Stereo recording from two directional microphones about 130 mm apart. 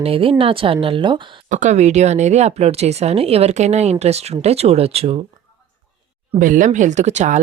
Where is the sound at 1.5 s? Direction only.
70° right (ahead or behind); by 5.2 s 50° right (ahead or behind).